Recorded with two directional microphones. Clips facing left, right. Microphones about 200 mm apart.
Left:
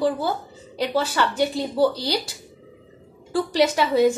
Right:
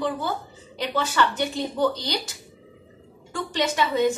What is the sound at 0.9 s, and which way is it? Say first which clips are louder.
Speech: even; 35° left (ahead or behind).